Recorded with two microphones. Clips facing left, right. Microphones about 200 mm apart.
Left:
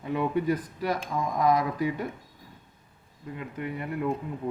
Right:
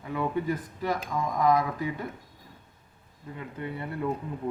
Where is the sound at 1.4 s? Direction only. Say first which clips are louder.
Even; 15° left (ahead or behind).